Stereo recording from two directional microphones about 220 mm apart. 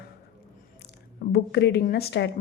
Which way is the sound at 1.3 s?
50° left (ahead or behind).